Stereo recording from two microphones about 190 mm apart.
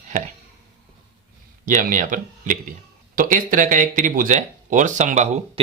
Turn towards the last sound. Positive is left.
turn(degrees=-40)  # may be behind; listen again after turning